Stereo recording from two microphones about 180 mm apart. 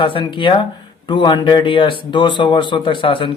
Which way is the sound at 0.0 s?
30° left (ahead or behind).